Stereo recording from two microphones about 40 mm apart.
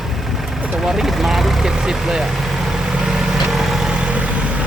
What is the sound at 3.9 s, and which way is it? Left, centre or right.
Vehicle, right.